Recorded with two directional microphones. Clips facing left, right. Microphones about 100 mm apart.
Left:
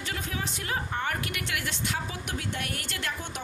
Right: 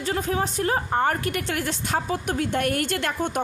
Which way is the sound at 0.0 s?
40° right (ahead or behind).